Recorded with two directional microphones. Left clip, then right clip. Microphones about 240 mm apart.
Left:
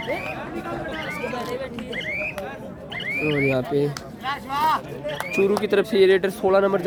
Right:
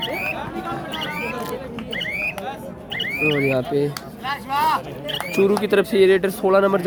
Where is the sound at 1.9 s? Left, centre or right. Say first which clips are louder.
Right 3 dB; right.